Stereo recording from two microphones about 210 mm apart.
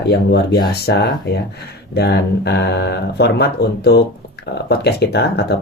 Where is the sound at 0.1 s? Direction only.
55° left (ahead or behind).